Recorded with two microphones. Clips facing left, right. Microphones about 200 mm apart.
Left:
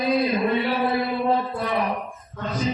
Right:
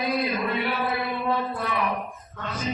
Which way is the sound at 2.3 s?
30° left (ahead or behind).